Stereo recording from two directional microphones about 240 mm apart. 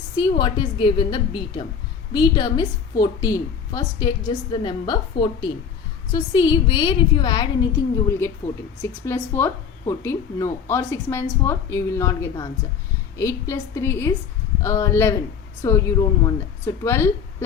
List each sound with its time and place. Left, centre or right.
0.2 s a woman's voice: centre